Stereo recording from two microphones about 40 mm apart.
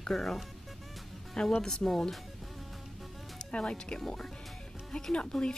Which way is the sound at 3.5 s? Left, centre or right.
Left.